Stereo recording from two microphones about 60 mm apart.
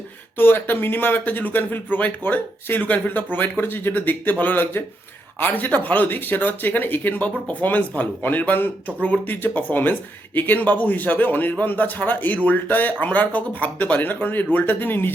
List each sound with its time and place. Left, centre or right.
0.3 s speech: left